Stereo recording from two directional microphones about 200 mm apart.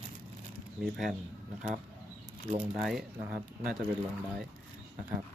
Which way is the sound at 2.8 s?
Centre (ahead or behind).